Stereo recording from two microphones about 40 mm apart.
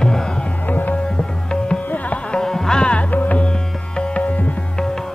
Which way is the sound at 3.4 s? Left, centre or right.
Left.